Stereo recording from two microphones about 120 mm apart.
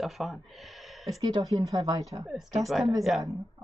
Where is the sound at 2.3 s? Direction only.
Centre (ahead or behind).